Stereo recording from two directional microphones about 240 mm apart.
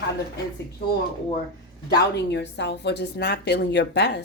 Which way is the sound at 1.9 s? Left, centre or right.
Left.